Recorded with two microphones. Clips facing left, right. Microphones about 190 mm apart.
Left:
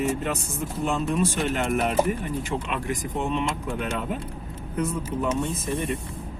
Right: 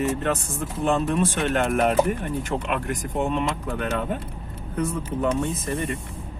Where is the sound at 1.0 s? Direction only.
55° right (ahead or behind).